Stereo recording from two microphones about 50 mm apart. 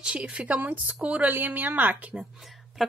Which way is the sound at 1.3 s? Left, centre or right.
Right.